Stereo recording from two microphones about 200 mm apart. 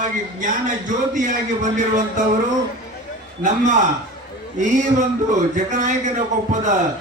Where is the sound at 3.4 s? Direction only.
40° right (ahead or behind).